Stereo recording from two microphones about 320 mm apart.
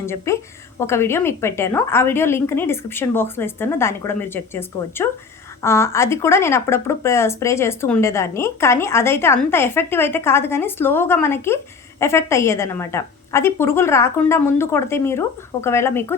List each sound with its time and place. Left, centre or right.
0.0 s speech: centre